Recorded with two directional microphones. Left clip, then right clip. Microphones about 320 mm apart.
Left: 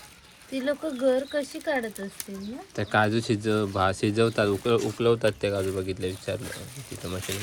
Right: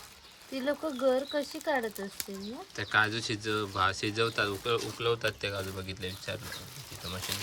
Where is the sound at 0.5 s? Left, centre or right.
Right.